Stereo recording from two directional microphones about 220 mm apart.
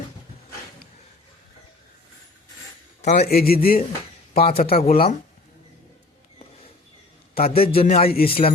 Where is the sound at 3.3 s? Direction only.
45° left (ahead or behind).